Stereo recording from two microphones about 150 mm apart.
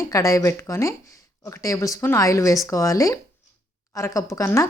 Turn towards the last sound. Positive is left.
turn(degrees=20)  # may be behind; listen again after turning